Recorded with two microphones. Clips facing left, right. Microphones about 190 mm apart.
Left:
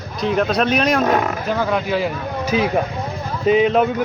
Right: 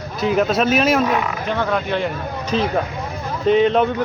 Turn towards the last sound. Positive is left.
turn(degrees=5)  # may be behind; listen again after turning